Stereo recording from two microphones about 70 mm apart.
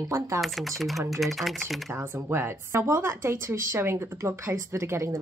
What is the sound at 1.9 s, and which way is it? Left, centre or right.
Speech, right.